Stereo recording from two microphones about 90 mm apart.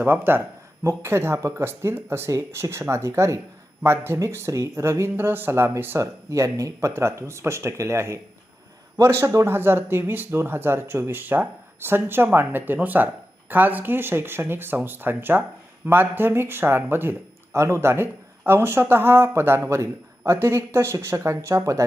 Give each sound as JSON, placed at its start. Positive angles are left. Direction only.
{"t": 0.0, "sound": "speech", "side_deg": -25}